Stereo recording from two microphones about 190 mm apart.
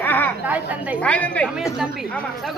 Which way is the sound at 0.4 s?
10° right (ahead or behind).